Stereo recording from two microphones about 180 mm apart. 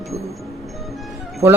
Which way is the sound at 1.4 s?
10° right (ahead or behind).